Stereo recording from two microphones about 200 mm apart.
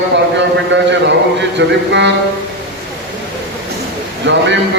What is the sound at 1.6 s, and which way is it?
Speech, 65° right (ahead or behind).